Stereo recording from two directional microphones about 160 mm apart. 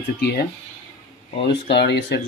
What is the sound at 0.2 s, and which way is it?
Speech, 80° left.